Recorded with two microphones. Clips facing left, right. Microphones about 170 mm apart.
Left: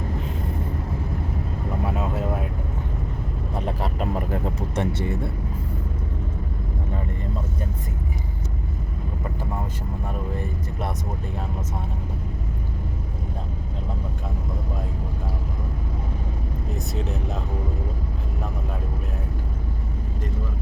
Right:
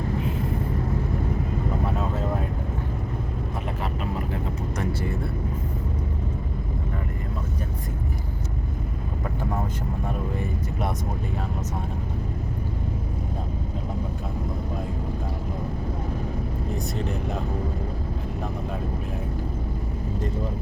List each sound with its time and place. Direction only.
4.7 s vehicle: 25° left (ahead or behind)
16.7 s speech: 5° left (ahead or behind)